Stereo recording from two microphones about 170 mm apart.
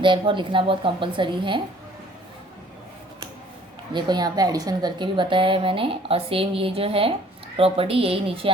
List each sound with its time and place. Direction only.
0.0 s a woman's voice: 30° right (ahead or behind)
3.9 s a woman's voice: 25° right (ahead or behind)